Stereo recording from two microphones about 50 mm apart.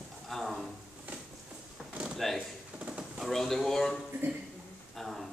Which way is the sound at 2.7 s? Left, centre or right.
Right.